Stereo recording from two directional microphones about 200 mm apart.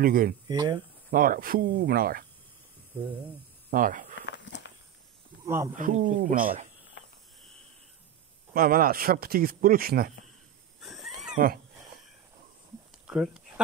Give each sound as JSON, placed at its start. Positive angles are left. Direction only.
{"t": 0.0, "sound": "speech", "side_deg": -45}
{"t": 0.5, "sound": "speech", "side_deg": -20}
{"t": 1.1, "sound": "speech", "side_deg": -45}
{"t": 3.7, "sound": "speech", "side_deg": -45}
{"t": 4.3, "sound": "a sound", "side_deg": 65}
{"t": 5.5, "sound": "speech", "side_deg": -10}
{"t": 5.8, "sound": "speech", "side_deg": -40}
{"t": 8.5, "sound": "speech", "side_deg": -45}
{"t": 10.8, "sound": "wild animals", "side_deg": 0}
{"t": 11.3, "sound": "speech", "side_deg": -45}
{"t": 13.0, "sound": "speech", "side_deg": -5}